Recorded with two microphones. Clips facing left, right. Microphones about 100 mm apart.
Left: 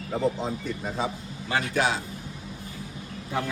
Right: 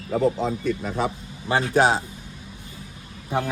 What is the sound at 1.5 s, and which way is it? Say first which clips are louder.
Speech: right 6 dB; 30° right (ahead or behind).